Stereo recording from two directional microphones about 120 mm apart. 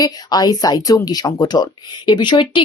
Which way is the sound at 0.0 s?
35° left (ahead or behind).